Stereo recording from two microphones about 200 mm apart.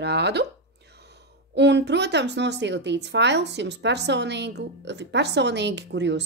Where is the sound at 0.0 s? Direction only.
55° right (ahead or behind).